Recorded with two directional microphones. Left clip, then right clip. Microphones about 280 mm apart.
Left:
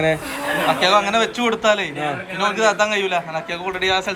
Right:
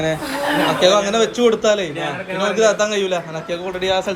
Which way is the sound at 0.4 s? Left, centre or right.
Centre.